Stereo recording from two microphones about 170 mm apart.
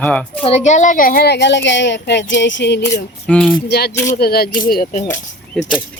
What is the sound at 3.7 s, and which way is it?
Speech, 70° left (ahead or behind).